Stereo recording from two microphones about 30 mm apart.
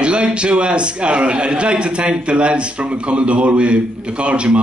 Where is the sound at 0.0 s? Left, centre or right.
Right.